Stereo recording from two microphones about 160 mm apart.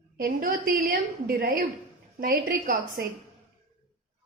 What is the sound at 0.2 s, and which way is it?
A woman's voice, 60° right (ahead or behind).